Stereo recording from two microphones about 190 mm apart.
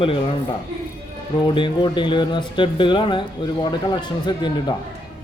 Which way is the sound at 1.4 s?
25° left (ahead or behind).